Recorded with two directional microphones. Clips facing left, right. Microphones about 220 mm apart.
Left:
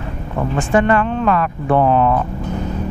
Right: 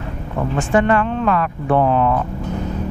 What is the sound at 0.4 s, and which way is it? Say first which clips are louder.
Speech: left 1 dB; 20° left (ahead or behind).